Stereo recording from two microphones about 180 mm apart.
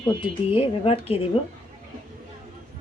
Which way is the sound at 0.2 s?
30° left (ahead or behind).